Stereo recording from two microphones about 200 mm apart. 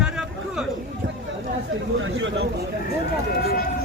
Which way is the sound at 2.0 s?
65° right (ahead or behind).